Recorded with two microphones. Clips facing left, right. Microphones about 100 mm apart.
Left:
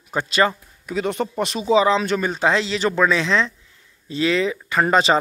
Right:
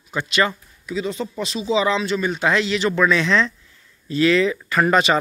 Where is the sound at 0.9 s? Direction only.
60° left (ahead or behind).